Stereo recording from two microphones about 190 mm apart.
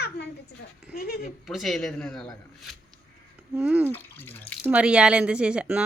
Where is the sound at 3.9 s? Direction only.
10° left (ahead or behind).